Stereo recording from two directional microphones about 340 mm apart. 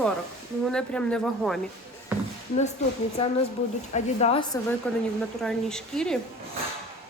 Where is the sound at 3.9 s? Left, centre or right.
Centre.